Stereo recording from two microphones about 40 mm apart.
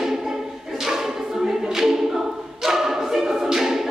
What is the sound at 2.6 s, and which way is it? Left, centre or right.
A capella, centre.